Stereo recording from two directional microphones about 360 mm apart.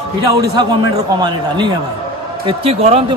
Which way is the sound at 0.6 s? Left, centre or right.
Centre.